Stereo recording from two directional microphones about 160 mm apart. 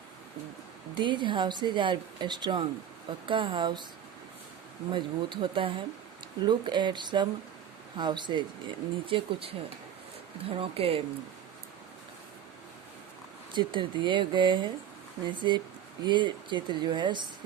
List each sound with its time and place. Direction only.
0.9 s speech: 30° right (ahead or behind)
4.9 s speech: 30° right (ahead or behind)
13.5 s speech: 30° right (ahead or behind)